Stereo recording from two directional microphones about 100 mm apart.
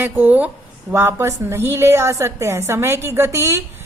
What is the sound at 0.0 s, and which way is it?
A woman's voice, 20° right (ahead or behind).